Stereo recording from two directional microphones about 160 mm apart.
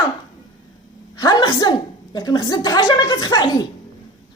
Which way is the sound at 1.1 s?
25° left (ahead or behind).